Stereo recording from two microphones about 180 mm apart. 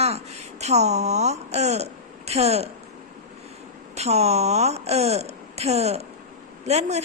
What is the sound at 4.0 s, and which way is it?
A woman's voice, 35° right (ahead or behind).